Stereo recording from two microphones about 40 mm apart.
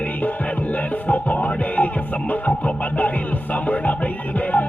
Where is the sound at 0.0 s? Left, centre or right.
Left.